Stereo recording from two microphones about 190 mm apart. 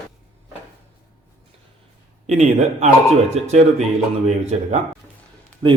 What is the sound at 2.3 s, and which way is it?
A man's voice, 35° right (ahead or behind).